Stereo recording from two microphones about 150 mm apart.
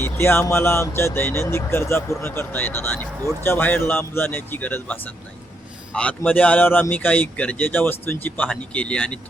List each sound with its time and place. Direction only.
0.0 s a man's voice: 15° left (ahead or behind)